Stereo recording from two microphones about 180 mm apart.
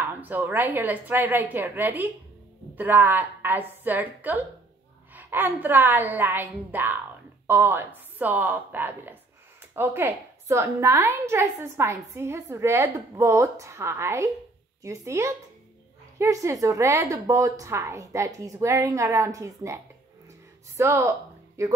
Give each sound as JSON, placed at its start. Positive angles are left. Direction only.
{"t": 0.0, "sound": "a woman's voice", "side_deg": -10}